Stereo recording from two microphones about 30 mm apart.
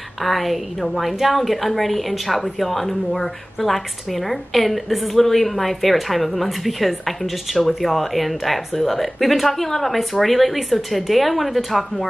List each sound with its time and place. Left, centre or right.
0.2 s a woman's voice: centre